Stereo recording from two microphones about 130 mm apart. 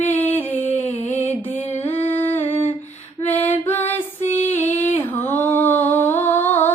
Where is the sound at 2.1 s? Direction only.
15° left (ahead or behind).